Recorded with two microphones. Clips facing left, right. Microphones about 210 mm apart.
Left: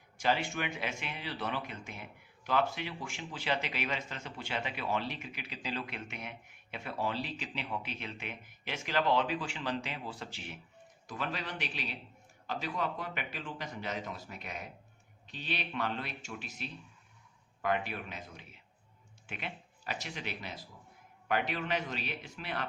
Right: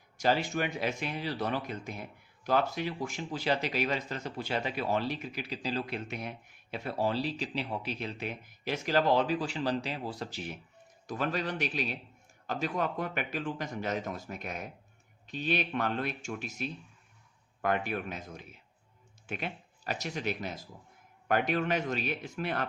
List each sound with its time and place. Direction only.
0.2 s a man's voice: 40° right (ahead or behind)